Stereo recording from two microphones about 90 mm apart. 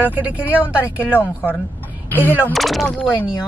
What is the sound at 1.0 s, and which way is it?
Speech, 20° left (ahead or behind).